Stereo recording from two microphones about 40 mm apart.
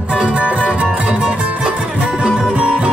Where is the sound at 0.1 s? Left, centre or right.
Right.